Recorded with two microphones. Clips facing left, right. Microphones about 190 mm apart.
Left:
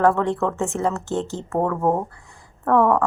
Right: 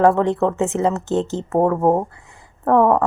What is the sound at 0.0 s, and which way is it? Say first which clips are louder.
Speech: right 4 dB; 20° right (ahead or behind).